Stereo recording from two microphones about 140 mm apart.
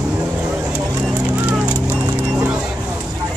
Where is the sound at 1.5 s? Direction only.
15° right (ahead or behind).